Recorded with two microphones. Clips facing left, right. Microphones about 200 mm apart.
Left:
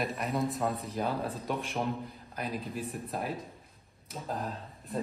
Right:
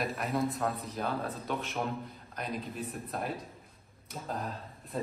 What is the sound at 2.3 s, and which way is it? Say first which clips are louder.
Speech: left 1 dB; centre (ahead or behind).